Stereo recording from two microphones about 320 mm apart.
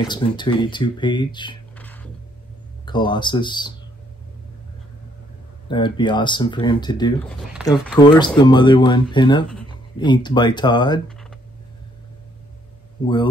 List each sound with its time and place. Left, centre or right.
0.0 s speech: centre
5.7 s speech: centre
11.1 s a sound: centre
13.0 s speech: centre